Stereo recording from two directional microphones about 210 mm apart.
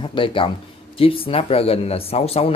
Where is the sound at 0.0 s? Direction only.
25° left (ahead or behind).